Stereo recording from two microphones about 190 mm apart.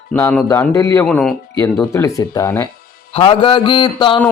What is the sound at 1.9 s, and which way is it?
Speech, 15° left (ahead or behind).